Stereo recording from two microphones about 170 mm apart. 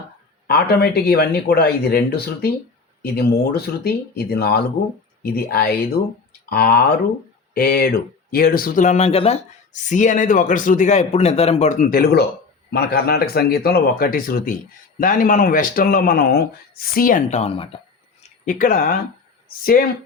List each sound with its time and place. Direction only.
0.4 s speech: 65° left (ahead or behind); by 17.7 s 35° left (ahead or behind)
18.4 s speech: 50° left (ahead or behind)